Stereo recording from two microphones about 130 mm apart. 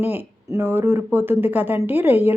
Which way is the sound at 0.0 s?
15° right (ahead or behind).